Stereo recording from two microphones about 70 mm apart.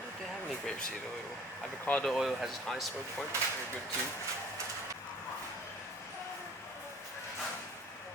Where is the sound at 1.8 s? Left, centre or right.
Left.